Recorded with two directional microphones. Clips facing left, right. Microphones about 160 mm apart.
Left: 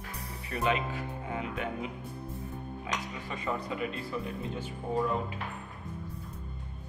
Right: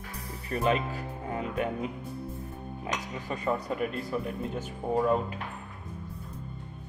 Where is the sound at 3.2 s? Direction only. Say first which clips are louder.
Right 5 dB; 40° right (ahead or behind).